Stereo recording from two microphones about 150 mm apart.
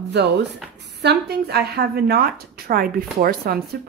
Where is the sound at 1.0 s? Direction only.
90° right.